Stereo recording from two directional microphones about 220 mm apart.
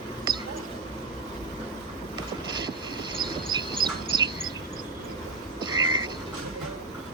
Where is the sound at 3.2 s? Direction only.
20° right (ahead or behind).